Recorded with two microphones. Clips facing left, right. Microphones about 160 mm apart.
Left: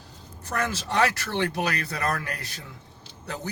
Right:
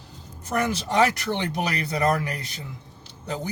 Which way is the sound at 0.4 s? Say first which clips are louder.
Right 4 dB; 15° right (ahead or behind).